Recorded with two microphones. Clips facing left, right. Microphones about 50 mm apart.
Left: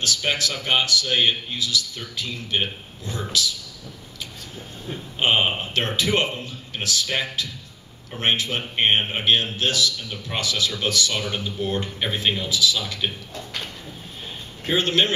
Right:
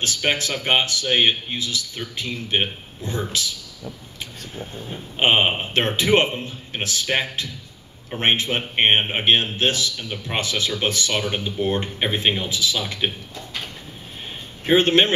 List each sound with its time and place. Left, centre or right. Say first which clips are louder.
0.0 s speech: right 1 dB; right
5.2 s speech: right 2 dB; right
14.7 s speech: right 5 dB; right